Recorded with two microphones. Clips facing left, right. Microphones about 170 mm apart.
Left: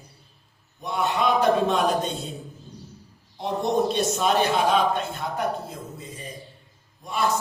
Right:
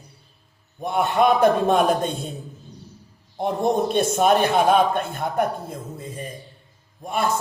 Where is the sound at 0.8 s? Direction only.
55° right (ahead or behind).